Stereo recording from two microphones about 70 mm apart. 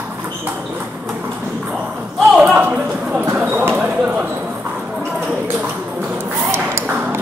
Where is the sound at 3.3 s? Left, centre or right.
Right.